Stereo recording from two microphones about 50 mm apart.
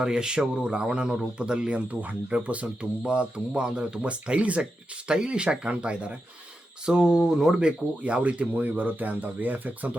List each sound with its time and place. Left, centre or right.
0.0 s speech: centre
8.0 s speech: right